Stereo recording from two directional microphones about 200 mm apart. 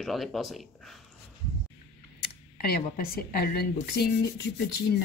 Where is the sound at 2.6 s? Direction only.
50° left (ahead or behind).